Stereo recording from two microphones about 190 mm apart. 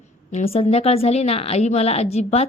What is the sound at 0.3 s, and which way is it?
Speech, 35° left (ahead or behind).